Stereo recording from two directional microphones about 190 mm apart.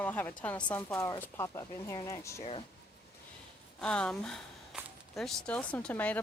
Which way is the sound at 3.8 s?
5° left (ahead or behind).